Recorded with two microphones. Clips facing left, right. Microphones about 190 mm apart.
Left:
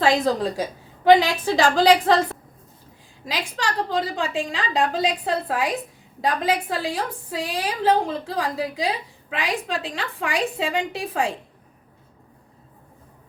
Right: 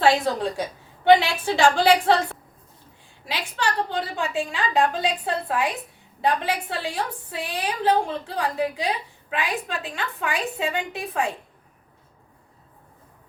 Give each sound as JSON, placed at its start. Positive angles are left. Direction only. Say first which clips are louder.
{"t": 0.0, "sound": "a woman's voice", "louder": "left 1 dB", "side_deg": 35}
{"t": 3.8, "sound": "a woman's voice", "louder": "left 4 dB", "side_deg": 35}
{"t": 4.2, "sound": "a woman's voice", "louder": "left 1 dB", "side_deg": 90}
{"t": 4.7, "sound": "a woman's voice", "louder": "left 1 dB", "side_deg": 35}
{"t": 7.3, "sound": "a woman's voice", "louder": "left 4 dB", "side_deg": 90}
{"t": 7.5, "sound": "a woman's voice", "louder": "left 1 dB", "side_deg": 35}